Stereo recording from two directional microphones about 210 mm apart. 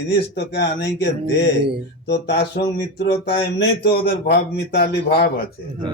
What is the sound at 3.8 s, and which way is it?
Speech, 50° left (ahead or behind).